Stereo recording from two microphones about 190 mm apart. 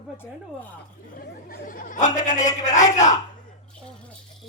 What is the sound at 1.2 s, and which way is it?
A man's voice, 50° left (ahead or behind).